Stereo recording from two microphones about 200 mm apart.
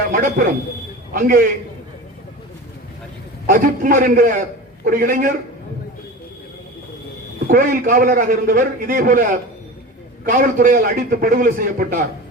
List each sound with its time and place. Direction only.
0.1 s a man's voice: 45° right (ahead or behind)
3.4 s a man's voice: 40° right (ahead or behind)
7.4 s a man's voice: 45° right (ahead or behind)